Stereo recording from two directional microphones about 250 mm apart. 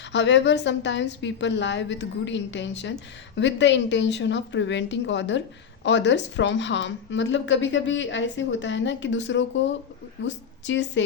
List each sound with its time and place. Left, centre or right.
0.1 s a woman's voice: left